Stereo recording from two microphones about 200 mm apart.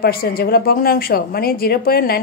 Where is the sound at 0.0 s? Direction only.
50° left (ahead or behind).